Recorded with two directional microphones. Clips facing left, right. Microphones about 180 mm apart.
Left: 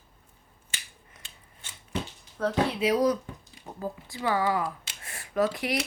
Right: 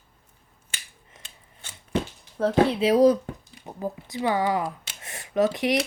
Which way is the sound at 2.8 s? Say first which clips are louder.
Right 6 dB; 30° right (ahead or behind).